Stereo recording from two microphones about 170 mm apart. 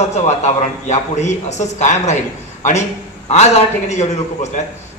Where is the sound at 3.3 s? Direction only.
40° left (ahead or behind).